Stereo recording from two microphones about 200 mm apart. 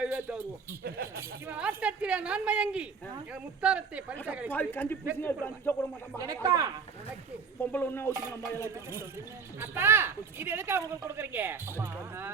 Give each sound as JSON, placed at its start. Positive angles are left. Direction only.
{"t": 0.0, "sound": "a sound", "side_deg": -5}
{"t": 0.9, "sound": "speech", "side_deg": -50}
{"t": 1.5, "sound": "speech", "side_deg": -5}
{"t": 4.5, "sound": "a man's voice", "side_deg": 10}
{"t": 6.1, "sound": "speech", "side_deg": -20}
{"t": 7.6, "sound": "a man's voice", "side_deg": 10}
{"t": 9.6, "sound": "speech", "side_deg": -10}